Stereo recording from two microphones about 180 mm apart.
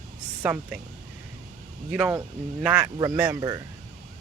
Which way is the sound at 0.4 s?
10° right (ahead or behind).